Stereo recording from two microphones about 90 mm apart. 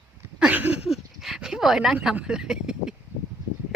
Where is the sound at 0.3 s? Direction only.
15° right (ahead or behind).